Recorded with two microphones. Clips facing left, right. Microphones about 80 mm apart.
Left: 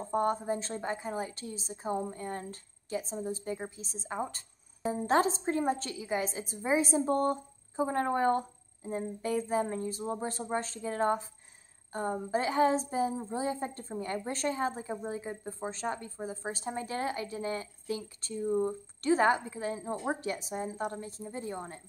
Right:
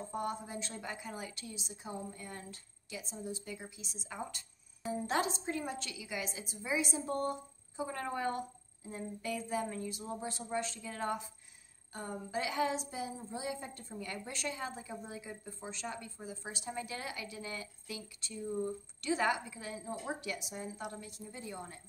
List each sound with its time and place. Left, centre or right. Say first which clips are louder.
0.0 s a woman's voice: left 8 dB; left